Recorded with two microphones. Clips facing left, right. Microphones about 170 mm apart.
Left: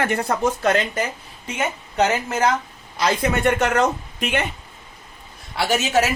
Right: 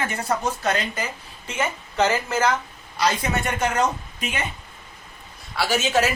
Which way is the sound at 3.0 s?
60° left (ahead or behind).